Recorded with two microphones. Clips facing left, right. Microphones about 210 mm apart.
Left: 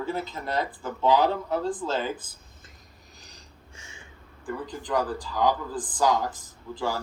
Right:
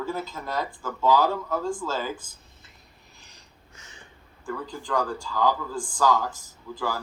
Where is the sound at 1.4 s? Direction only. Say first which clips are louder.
Left 1 dB; 30° left (ahead or behind).